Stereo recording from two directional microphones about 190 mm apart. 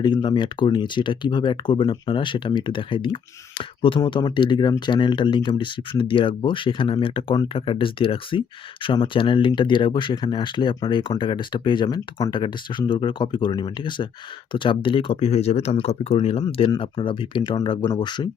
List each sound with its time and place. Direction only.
0.0 s speech: 20° left (ahead or behind)